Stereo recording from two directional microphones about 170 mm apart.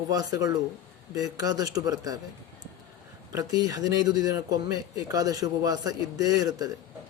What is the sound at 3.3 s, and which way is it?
Speech, 20° right (ahead or behind).